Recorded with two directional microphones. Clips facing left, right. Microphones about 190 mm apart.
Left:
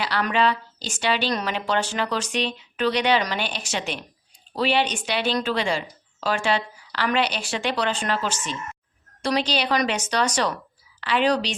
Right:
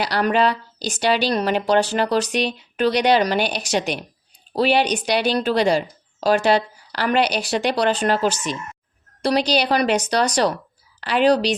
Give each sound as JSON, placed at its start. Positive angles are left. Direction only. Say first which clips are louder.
{"t": 0.0, "sound": "a woman's voice", "louder": "right 4 dB", "side_deg": -40}
{"t": 2.4, "sound": "speech", "louder": "right 4 dB", "side_deg": -10}
{"t": 2.7, "sound": "a woman's voice", "louder": "right 4 dB", "side_deg": -40}